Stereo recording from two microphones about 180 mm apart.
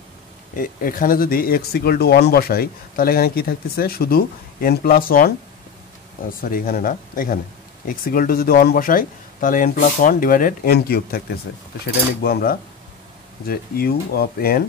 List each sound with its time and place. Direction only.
0.6 s speech: 50° left (ahead or behind)
6.4 s speech: 55° left (ahead or behind)